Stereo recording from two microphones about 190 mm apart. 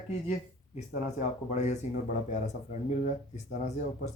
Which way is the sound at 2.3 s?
40° left (ahead or behind).